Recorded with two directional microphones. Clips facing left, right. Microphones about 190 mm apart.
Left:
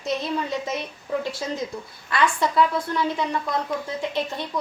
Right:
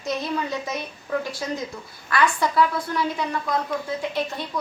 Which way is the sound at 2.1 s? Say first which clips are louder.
Even; 20° left (ahead or behind).